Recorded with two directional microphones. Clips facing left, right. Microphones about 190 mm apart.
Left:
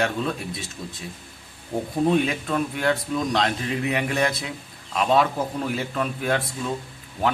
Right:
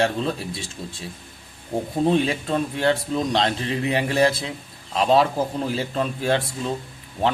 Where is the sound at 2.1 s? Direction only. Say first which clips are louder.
Right 1 dB; 30° right (ahead or behind).